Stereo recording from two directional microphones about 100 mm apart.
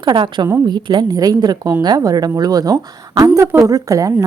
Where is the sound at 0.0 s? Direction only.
50° right (ahead or behind).